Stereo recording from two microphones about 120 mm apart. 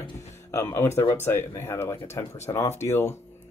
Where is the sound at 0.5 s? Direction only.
25° left (ahead or behind).